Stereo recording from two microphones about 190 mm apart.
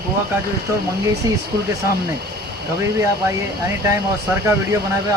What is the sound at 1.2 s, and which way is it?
Speech, 20° right (ahead or behind).